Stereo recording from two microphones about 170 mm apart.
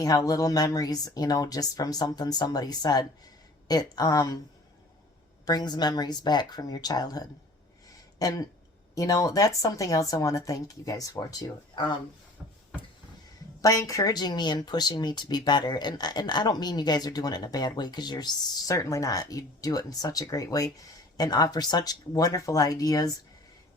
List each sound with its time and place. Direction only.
0.0 s speech: 20° left (ahead or behind)
5.5 s speech: 25° left (ahead or behind)
12.4 s a sound: 10° right (ahead or behind)
13.6 s speech: 20° left (ahead or behind)